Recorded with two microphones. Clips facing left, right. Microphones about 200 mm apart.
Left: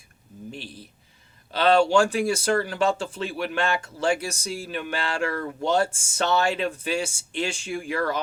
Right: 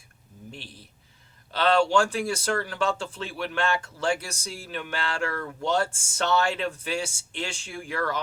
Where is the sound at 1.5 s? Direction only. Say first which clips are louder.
Left 3 dB; 15° left (ahead or behind).